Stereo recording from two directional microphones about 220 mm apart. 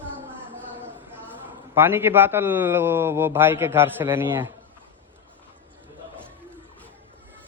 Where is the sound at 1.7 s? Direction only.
10° right (ahead or behind).